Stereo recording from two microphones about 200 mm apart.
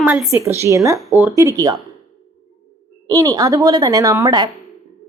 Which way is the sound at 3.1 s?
15° right (ahead or behind).